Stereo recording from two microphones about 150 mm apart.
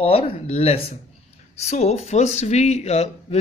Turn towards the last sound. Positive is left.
turn(degrees=45)  # may be behind; listen again after turning